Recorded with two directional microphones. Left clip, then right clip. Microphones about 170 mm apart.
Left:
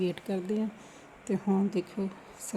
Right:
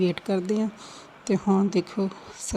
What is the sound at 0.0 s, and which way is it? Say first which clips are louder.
Speech: right 7 dB; 15° right (ahead or behind).